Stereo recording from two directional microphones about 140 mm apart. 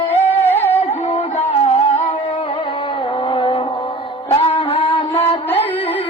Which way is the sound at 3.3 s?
35° left (ahead or behind).